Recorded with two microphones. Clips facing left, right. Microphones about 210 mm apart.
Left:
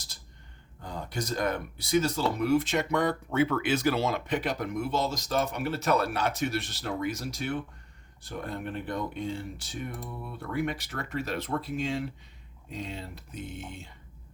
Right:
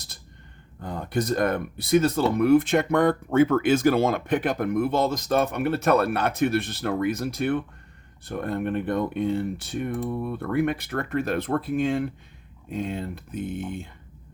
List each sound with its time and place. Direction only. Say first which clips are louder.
0.8 s speech: right 8 dB; 55° right (ahead or behind)